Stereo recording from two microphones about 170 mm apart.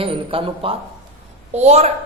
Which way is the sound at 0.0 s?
30° right (ahead or behind).